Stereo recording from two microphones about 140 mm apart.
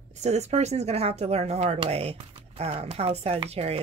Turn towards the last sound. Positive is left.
turn(degrees=-45)  # may be behind; listen again after turning